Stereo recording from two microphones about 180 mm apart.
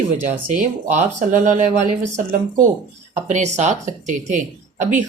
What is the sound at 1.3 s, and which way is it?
A woman's voice, 45° right (ahead or behind).